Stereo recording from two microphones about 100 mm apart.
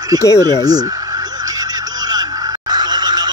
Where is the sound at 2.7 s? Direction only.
40° right (ahead or behind).